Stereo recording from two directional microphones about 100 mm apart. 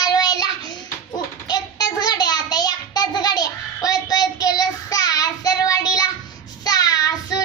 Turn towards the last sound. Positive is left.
turn(degrees=35)  # may be behind; listen again after turning